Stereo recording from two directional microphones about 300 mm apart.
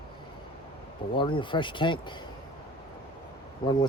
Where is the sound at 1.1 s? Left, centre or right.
Centre.